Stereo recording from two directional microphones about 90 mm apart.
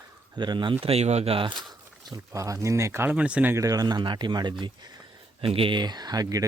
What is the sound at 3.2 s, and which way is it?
Speech, 15° right (ahead or behind).